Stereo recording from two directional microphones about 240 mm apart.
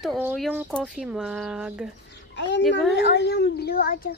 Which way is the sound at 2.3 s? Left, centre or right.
Left.